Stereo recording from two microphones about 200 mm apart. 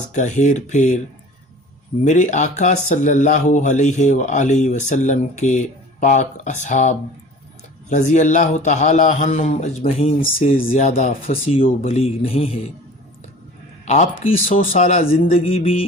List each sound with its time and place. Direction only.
0.1 s speech: 35° left (ahead or behind)
2.0 s speech: 35° left (ahead or behind)
13.8 s speech: 35° left (ahead or behind)